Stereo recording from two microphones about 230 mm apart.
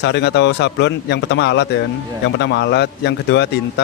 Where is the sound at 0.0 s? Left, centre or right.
Left.